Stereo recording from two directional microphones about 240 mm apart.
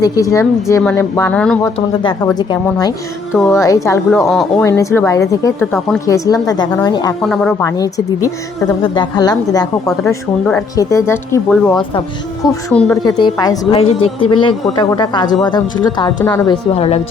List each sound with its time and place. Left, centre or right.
0.0 s speech: centre
2.2 s speech: centre
3.3 s speech: centre
3.6 s speech: centre
7.2 s speech: centre
7.6 s speech: centre
12.7 s speech: centre
13.1 s a woman's voice: centre